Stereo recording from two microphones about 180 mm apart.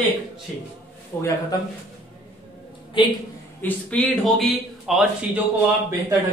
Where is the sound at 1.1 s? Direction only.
15° left (ahead or behind).